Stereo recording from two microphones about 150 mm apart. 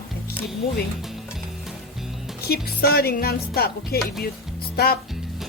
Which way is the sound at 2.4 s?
90° left.